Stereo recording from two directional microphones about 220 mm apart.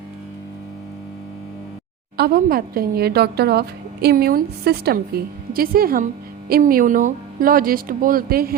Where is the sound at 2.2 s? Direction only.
45° right (ahead or behind).